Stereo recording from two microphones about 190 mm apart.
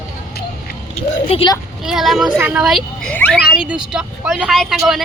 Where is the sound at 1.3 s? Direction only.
30° left (ahead or behind).